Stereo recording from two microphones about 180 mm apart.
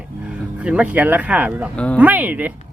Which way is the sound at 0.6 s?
5° right (ahead or behind).